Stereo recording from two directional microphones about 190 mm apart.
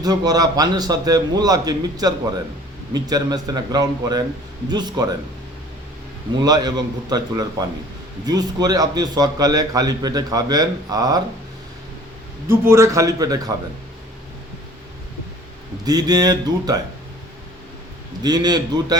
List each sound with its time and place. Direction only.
0.0 s a man's voice: 20° right (ahead or behind)
6.4 s a man's voice: 20° right (ahead or behind)
12.5 s a man's voice: 15° right (ahead or behind)
15.8 s a man's voice: 20° right (ahead or behind)
18.2 s a man's voice: 20° right (ahead or behind)